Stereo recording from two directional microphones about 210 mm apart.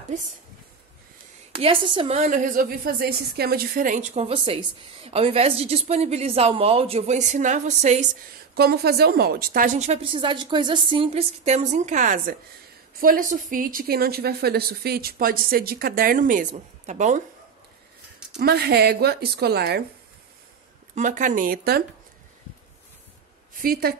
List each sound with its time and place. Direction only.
1.6 s a woman's voice: 25° right (ahead or behind)
8.5 s a woman's voice: 50° right (ahead or behind)
18.4 s a woman's voice: 50° right (ahead or behind)
20.9 s a woman's voice: 35° right (ahead or behind)
23.5 s a woman's voice: 45° right (ahead or behind)